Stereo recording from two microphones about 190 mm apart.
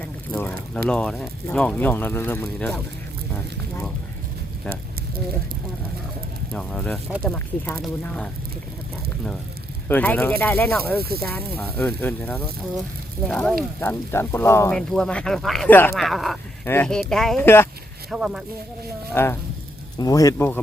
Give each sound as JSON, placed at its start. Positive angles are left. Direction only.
{"t": 0.0, "sound": "a sound", "side_deg": 10}
{"t": 0.9, "sound": "speech", "side_deg": 5}
{"t": 3.3, "sound": "a sound", "side_deg": 10}
{"t": 6.5, "sound": "speech", "side_deg": 5}
{"t": 9.9, "sound": "speech", "side_deg": 10}
{"t": 14.8, "sound": "speech", "side_deg": 5}
{"t": 18.1, "sound": "speech", "side_deg": 0}
{"t": 19.1, "sound": "speech", "side_deg": 10}